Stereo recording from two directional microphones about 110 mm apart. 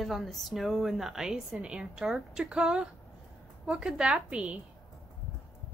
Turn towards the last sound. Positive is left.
turn(degrees=-10)  # may be behind; listen again after turning